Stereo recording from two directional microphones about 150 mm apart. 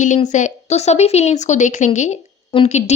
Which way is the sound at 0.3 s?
55° left (ahead or behind).